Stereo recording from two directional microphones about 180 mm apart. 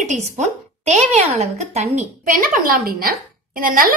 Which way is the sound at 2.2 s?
50° right (ahead or behind).